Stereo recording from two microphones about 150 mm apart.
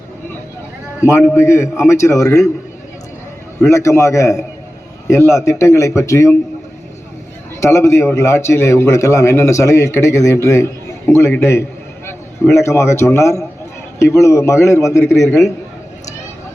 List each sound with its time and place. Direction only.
1.4 s a man's voice: 15° left (ahead or behind)
3.6 s a man's voice: 20° left (ahead or behind)
7.6 s a man's voice: 20° left (ahead or behind)